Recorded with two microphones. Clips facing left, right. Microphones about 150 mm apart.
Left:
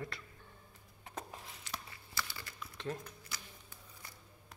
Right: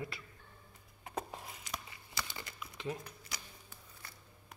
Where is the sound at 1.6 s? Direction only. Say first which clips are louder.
Right 1 dB; 20° right (ahead or behind).